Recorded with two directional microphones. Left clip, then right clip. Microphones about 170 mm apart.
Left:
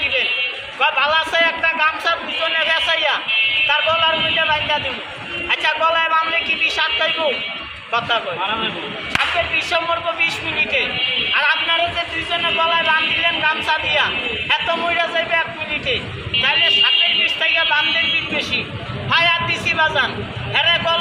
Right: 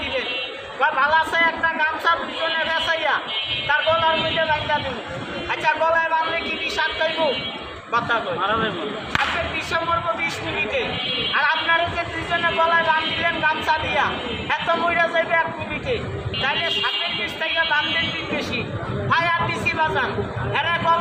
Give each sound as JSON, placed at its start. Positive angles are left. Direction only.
{"t": 0.8, "sound": "a sound", "side_deg": -10}
{"t": 3.7, "sound": "a man's voice", "side_deg": -10}
{"t": 9.1, "sound": "a man's voice", "side_deg": -15}
{"t": 19.1, "sound": "a man's voice", "side_deg": -15}